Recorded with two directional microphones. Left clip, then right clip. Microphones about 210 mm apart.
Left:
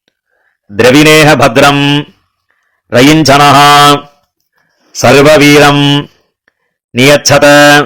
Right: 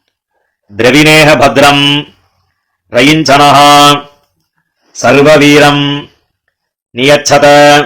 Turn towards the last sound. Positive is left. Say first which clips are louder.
# even
turn(degrees=35)  # may be behind; listen again after turning